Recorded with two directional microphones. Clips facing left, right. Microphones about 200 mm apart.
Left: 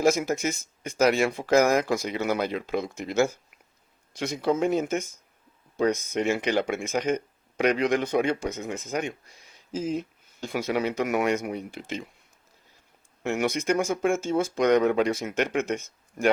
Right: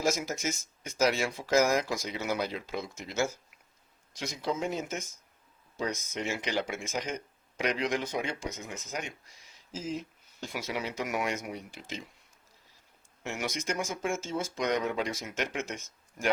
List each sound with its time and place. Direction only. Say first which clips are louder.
0.0 s speech: left 7 dB; 60° left (ahead or behind)
13.2 s speech: left 9 dB; 60° left (ahead or behind)